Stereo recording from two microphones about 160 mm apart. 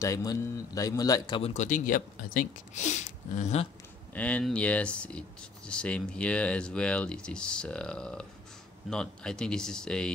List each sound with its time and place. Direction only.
0.0 s a man's voice: 20° left (ahead or behind)
1.4 s speech: 45° left (ahead or behind)
4.1 s speech: 10° left (ahead or behind)